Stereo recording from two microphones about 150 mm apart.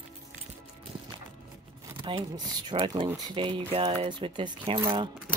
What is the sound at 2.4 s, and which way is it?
Speech, 30° right (ahead or behind).